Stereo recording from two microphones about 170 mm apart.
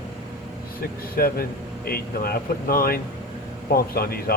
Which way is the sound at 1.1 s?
60° left (ahead or behind).